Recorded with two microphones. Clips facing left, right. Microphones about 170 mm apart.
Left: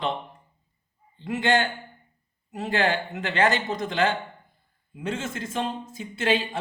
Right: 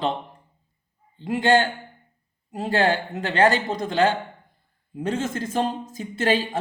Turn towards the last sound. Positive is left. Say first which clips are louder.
# right 2 dB
turn(degrees=-40)  # may be behind; listen again after turning